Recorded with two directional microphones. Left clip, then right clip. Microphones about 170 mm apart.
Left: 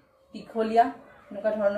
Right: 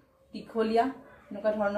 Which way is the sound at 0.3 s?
20° right (ahead or behind).